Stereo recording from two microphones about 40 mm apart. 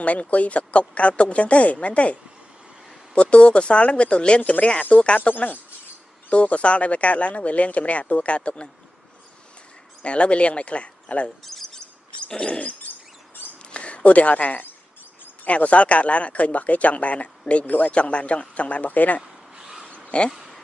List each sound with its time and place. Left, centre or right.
0.0 s speech: left
3.2 s speech: left
6.3 s speech: left
10.0 s speech: left
11.4 s a sound: centre
12.3 s bird: left
12.9 s rodents: left
13.7 s speech: left
19.6 s zipper: centre
20.1 s speech: left